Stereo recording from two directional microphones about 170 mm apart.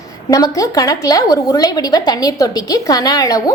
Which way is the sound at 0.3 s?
20° left (ahead or behind).